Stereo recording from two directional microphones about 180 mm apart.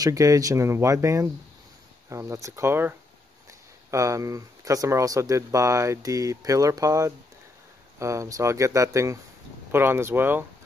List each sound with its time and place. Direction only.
0.0 s speech: 20° right (ahead or behind)
3.9 s speech: 15° right (ahead or behind)